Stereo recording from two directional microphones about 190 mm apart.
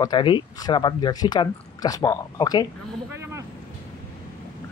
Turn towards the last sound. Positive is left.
turn(degrees=-15)  # may be behind; listen again after turning